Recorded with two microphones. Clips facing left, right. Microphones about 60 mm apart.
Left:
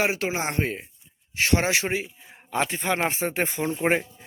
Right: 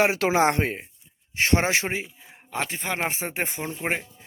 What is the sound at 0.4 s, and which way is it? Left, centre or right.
Speech, right.